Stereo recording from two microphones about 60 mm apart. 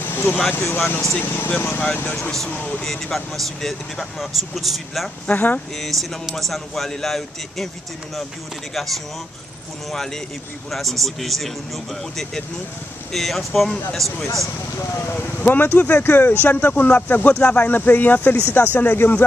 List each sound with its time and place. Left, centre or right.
0.0 s a sound: left
0.6 s speech: left
2.5 s speech: left
2.8 s a man's voice: centre
5.2 s speech: left
5.8 s a man's voice: centre
8.7 s a man's voice: centre
10.7 s a man's voice: centre
15.4 s speech: left